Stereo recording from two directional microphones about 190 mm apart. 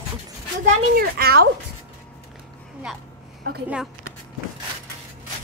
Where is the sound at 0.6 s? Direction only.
50° right (ahead or behind).